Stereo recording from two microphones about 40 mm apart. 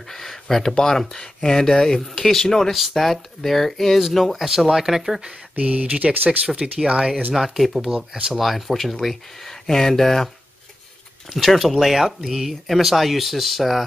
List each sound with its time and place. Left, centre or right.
0.1 s speech: centre
2.7 s speech: centre
5.6 s speech: right
6.1 s speech: right
7.3 s speech: centre
7.9 s speech: centre
8.4 s speech: centre
11.3 s speech: centre